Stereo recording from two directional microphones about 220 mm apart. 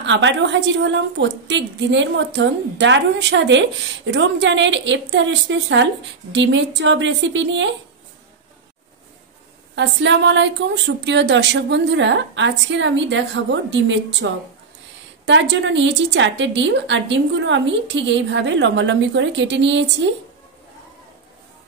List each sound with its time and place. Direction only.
0.0 s a woman's voice: 55° right (ahead or behind)
9.8 s a woman's voice: 55° right (ahead or behind)